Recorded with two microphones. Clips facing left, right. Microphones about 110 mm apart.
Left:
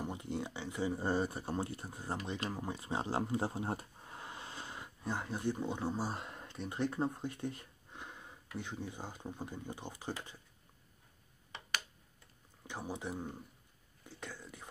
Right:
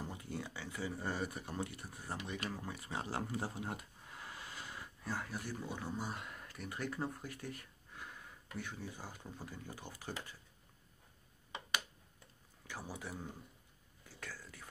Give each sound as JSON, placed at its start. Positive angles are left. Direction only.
{"t": 0.0, "sound": "speech", "side_deg": 20}
{"t": 12.6, "sound": "speech", "side_deg": 20}
{"t": 14.0, "sound": "a sound", "side_deg": 20}